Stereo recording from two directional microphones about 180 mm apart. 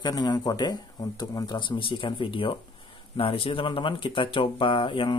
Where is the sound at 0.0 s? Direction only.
20° left (ahead or behind).